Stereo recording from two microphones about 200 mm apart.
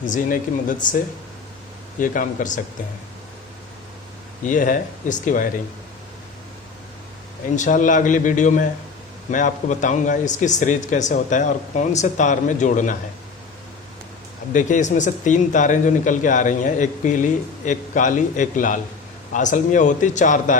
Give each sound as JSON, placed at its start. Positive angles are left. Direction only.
{"t": 0.0, "sound": "a man's voice", "side_deg": 40}
{"t": 2.0, "sound": "a man's voice", "side_deg": 40}
{"t": 4.4, "sound": "a man's voice", "side_deg": 40}
{"t": 7.5, "sound": "a man's voice", "side_deg": 40}
{"t": 14.5, "sound": "a man's voice", "side_deg": 40}